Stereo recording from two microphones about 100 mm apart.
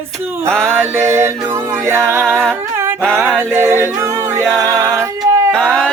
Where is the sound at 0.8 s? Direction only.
25° right (ahead or behind).